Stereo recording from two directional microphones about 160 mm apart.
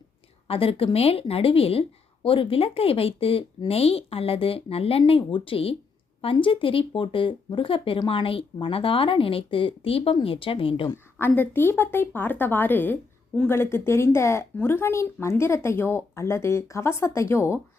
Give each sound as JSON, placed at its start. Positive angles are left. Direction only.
{"t": 0.4, "sound": "speech", "side_deg": 35}
{"t": 11.2, "sound": "speech", "side_deg": 10}